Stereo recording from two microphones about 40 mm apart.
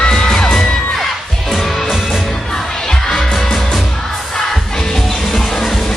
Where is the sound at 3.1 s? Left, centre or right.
Centre.